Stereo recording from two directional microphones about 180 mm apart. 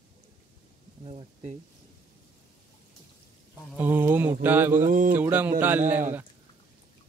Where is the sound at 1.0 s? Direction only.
35° right (ahead or behind).